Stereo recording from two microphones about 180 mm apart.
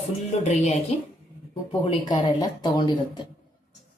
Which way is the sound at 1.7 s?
25° left (ahead or behind).